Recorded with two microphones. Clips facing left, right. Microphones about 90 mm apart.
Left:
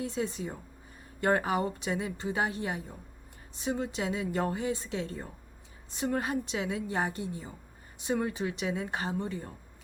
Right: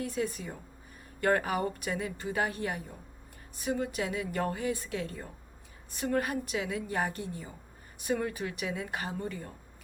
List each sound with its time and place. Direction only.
0.0 s a woman's voice: 25° left (ahead or behind)